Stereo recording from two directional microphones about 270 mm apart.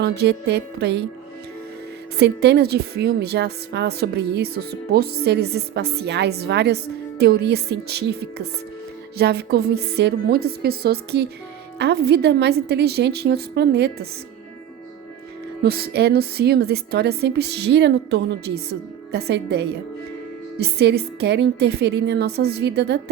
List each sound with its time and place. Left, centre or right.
0.2 s a woman's voice: right
2.1 s a woman's voice: right
15.6 s a woman's voice: right